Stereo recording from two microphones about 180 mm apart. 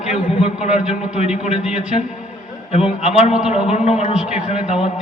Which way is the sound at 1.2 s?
35° left (ahead or behind).